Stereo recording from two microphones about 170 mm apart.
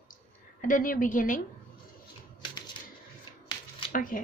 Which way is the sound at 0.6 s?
50° left (ahead or behind).